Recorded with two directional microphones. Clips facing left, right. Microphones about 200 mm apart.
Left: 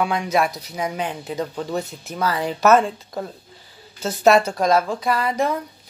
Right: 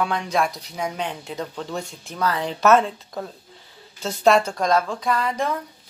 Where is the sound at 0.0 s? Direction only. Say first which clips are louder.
Left 2 dB; 10° left (ahead or behind).